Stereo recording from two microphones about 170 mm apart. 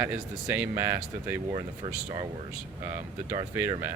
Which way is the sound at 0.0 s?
10° right (ahead or behind).